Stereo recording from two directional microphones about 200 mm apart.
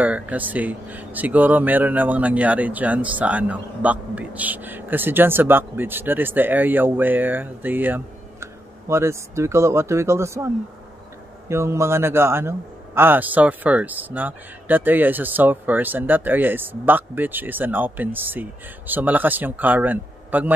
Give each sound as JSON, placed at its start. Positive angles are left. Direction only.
{"t": 0.0, "sound": "speech", "side_deg": -5}